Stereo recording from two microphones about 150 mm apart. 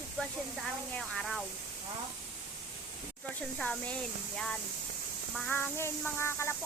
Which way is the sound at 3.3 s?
10° left (ahead or behind).